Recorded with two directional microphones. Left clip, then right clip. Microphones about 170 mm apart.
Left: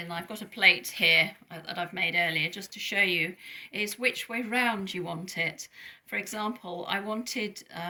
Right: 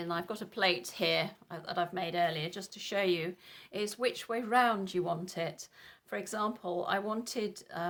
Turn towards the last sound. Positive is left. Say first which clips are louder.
# left 2 dB
turn(degrees=-50)  # may be behind; listen again after turning